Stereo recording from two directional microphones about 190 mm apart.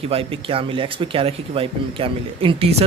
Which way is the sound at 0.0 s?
30° right (ahead or behind).